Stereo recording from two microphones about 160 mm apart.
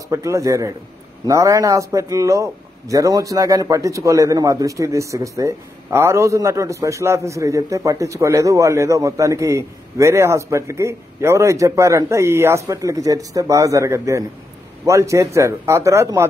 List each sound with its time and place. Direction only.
0.1 s a man's voice: 20° right (ahead or behind)